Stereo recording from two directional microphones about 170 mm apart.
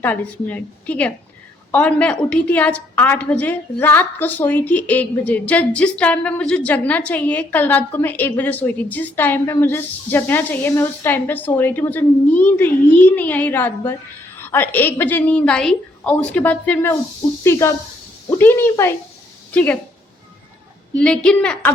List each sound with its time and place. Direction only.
0.0 s a woman's voice: 10° left (ahead or behind)
20.9 s a woman's voice: 5° left (ahead or behind)